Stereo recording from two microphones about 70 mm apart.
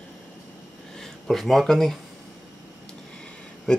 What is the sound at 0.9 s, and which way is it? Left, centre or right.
Speech, centre.